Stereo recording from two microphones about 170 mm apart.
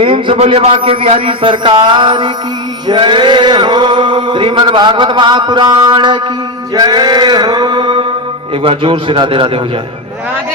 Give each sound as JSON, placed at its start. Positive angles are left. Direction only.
{"t": 0.0, "sound": "a man's voice", "side_deg": -30}
{"t": 0.4, "sound": "chant", "side_deg": -35}
{"t": 8.6, "sound": "a man's voice", "side_deg": -30}